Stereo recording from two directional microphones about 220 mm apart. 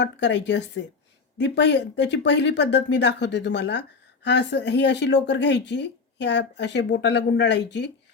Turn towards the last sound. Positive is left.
turn(degrees=50)  # may be behind; listen again after turning